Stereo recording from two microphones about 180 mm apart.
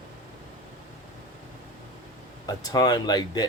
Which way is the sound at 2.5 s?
20° left (ahead or behind).